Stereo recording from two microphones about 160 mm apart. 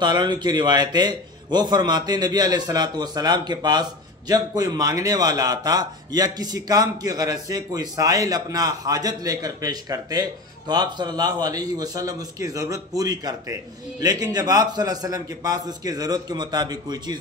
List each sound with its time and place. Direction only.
0.0 s speech: 25° right (ahead or behind)